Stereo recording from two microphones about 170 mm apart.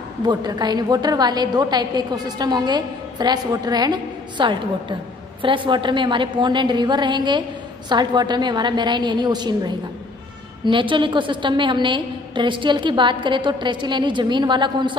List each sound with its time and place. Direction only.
0.2 s a woman's voice: 25° right (ahead or behind)